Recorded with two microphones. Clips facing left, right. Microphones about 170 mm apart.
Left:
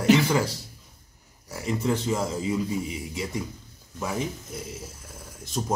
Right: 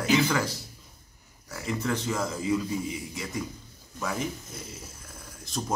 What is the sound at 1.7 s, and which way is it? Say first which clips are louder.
Speech: left 4 dB; 20° left (ahead or behind).